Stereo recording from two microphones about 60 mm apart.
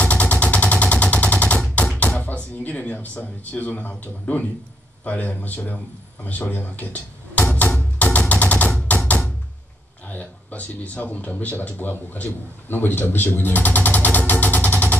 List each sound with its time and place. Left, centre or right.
0.0 s machine gun: left
1.8 s bouncing: left
2.6 s speech: left
6.2 s music: left
10.0 s a man's voice: left